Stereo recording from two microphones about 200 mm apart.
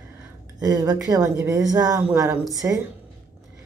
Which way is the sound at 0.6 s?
20° right (ahead or behind).